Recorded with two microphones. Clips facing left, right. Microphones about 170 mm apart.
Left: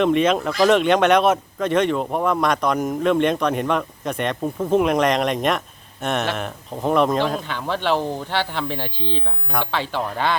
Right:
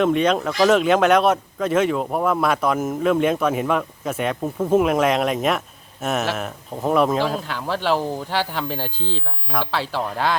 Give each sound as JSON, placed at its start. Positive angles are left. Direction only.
{"t": 0.0, "sound": "speech", "side_deg": 0}